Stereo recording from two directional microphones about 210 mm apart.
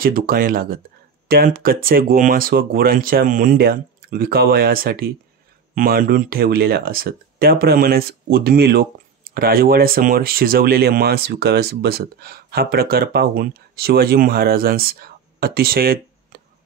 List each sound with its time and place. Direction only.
0.0 s speech: 45° right (ahead or behind)